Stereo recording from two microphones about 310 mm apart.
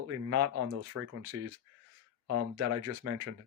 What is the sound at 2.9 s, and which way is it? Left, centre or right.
Speech, right.